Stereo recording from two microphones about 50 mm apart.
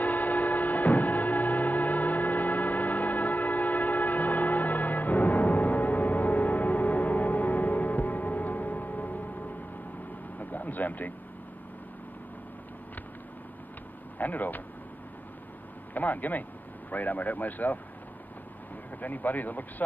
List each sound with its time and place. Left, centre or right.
0.0 s music: left
10.4 s vehicle: left
14.1 s speech: left
15.9 s speech: left
18.9 s speech: left